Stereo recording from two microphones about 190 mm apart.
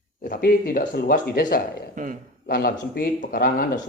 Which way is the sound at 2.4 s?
55° left (ahead or behind).